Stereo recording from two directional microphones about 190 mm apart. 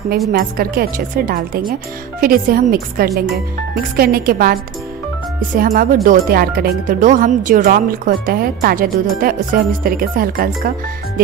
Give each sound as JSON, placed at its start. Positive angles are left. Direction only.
{"t": 0.3, "sound": "speech", "side_deg": -50}
{"t": 5.6, "sound": "speech", "side_deg": -50}